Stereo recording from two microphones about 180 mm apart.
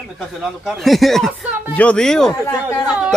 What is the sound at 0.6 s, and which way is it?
Speech, centre (ahead or behind).